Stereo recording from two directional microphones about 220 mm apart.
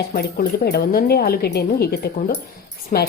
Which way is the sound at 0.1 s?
40° left (ahead or behind).